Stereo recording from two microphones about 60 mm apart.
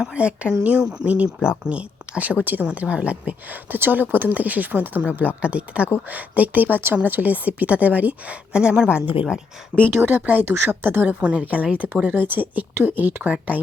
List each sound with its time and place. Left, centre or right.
0.0 s a woman's voice: centre
2.6 s a woman's voice: centre
10.0 s a woman's voice: right
10.4 s speech: right
10.7 s speech: right
11.1 s a woman's voice: centre